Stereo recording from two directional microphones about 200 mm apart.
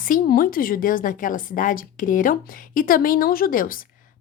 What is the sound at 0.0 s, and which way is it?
A woman's voice, 45° left (ahead or behind).